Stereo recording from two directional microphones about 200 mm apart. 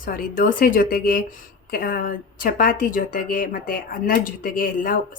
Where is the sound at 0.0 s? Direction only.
45° left (ahead or behind).